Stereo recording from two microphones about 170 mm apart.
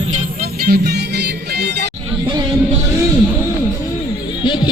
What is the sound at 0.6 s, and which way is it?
Music, 70° right (ahead or behind).